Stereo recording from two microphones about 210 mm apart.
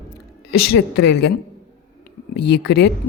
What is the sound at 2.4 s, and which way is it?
Speech, 50° left (ahead or behind).